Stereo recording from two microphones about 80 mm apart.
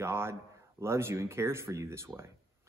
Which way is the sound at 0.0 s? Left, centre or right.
Right.